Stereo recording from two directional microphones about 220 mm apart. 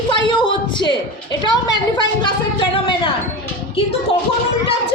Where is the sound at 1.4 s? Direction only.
20° left (ahead or behind).